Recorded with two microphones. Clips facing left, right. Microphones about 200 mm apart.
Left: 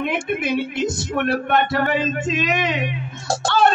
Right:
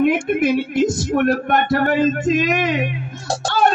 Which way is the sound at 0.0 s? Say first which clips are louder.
Right 7 dB; 45° right (ahead or behind).